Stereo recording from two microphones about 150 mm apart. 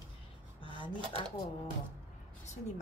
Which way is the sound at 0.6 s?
35° left (ahead or behind).